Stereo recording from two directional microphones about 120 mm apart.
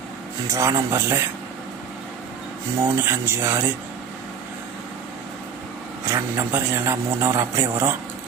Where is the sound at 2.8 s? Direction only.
20° right (ahead or behind).